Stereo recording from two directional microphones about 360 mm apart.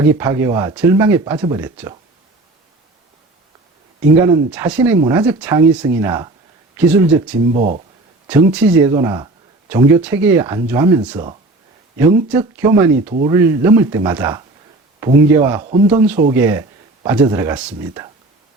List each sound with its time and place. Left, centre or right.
0.2 s speech: centre
4.2 s speech: centre